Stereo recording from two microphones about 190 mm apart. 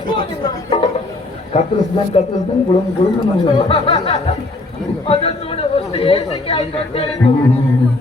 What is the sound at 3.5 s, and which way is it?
A man's voice, 30° left (ahead or behind).